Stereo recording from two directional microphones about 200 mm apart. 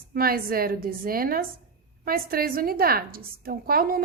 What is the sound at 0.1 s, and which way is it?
A woman's voice, 50° right (ahead or behind).